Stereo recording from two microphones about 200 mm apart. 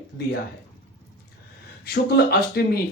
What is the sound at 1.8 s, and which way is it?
Speech, 55° left (ahead or behind).